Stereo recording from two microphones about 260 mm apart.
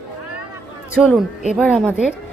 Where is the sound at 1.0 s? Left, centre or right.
Centre.